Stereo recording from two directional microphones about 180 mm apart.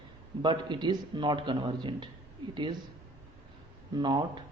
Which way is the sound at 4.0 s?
25° right (ahead or behind).